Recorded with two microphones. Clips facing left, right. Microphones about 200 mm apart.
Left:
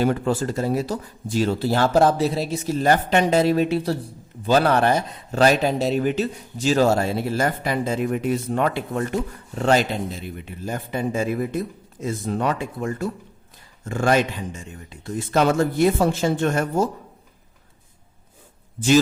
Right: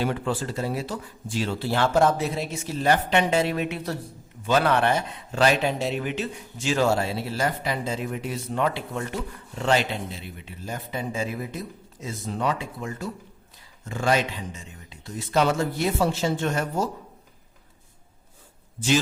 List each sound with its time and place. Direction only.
0.0 s speech: 45° left (ahead or behind)